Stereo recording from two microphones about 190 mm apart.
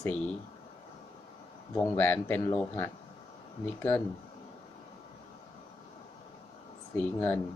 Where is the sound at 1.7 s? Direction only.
10° left (ahead or behind).